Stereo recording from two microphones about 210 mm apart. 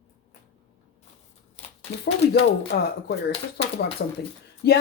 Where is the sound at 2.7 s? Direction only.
45° left (ahead or behind).